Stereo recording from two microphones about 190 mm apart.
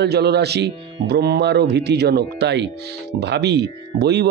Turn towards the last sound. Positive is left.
turn(degrees=-60)  # may be behind; listen again after turning